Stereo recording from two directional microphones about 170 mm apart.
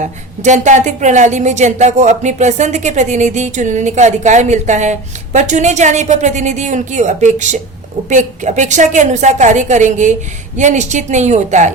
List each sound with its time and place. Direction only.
0.0 s a woman's voice: 45° right (ahead or behind)